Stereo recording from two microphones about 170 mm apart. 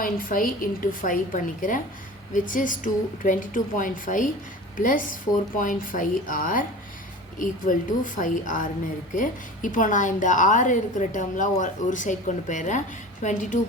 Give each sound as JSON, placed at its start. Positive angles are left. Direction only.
{"t": 0.0, "sound": "a woman's voice", "side_deg": 55}